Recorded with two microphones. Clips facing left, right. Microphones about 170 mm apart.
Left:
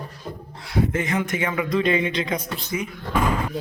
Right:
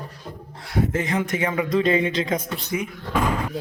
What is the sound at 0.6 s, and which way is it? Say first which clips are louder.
Speech: even; 45° right (ahead or behind).